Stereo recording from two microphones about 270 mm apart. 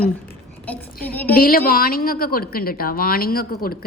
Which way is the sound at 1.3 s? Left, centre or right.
Left.